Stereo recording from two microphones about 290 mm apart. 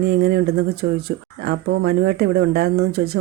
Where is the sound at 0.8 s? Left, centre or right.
Right.